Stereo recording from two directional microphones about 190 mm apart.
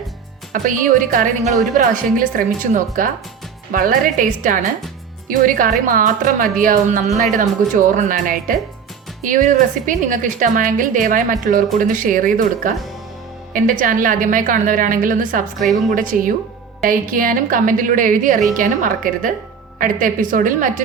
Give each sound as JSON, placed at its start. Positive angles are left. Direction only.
{"t": 0.5, "sound": "a woman's voice", "side_deg": -45}